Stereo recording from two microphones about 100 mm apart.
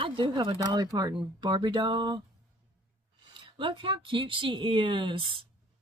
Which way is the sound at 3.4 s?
55° right (ahead or behind).